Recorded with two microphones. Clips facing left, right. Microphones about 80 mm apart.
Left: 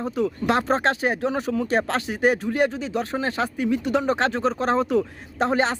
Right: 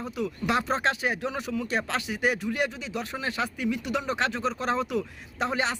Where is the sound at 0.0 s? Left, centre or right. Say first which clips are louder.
Left 7 dB; left.